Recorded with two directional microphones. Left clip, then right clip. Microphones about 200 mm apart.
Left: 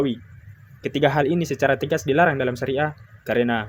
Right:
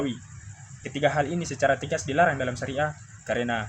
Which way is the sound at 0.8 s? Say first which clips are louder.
Left 5 dB; 50° left (ahead or behind).